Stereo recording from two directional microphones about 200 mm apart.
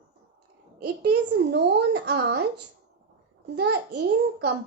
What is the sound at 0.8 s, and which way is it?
A woman's voice, 55° right (ahead or behind).